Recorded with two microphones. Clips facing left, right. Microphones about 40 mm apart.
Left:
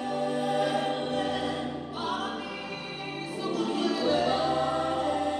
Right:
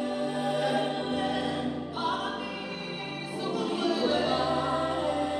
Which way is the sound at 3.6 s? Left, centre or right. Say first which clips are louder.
Even; centre.